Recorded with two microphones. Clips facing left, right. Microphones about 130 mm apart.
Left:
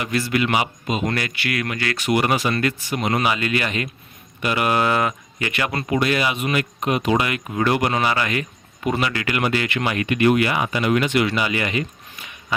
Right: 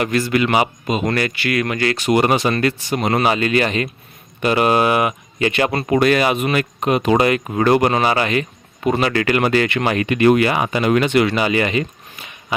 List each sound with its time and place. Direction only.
0.0 s a man's voice: 45° right (ahead or behind)
1.5 s speech: 30° right (ahead or behind)
5.5 s speech: 30° right (ahead or behind)
5.9 s speech: 50° right (ahead or behind); by 11.8 s 30° right (ahead or behind)